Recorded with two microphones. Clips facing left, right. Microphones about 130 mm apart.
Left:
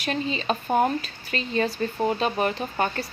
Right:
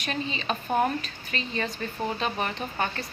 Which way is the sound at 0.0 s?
35° left (ahead or behind).